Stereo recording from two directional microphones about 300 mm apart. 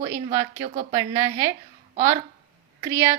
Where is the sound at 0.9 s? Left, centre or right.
Centre.